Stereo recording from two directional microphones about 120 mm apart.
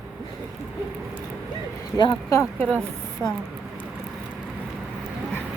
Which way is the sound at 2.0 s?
40° left (ahead or behind).